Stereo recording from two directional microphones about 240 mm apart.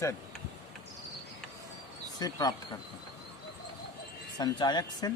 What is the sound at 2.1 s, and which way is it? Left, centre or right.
Speech, centre.